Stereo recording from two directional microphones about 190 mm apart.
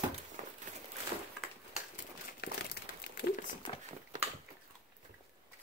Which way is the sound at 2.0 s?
55° left (ahead or behind).